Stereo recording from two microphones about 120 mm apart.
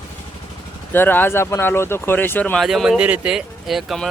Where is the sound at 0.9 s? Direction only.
15° left (ahead or behind).